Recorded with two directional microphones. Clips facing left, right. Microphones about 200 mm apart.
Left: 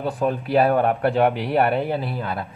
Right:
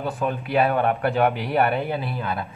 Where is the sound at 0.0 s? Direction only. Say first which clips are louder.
Left 3 dB; 35° left (ahead or behind).